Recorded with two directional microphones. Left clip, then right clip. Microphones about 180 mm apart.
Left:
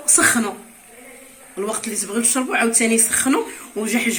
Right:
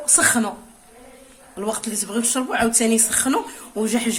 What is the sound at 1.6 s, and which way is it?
A woman's voice, 55° right (ahead or behind).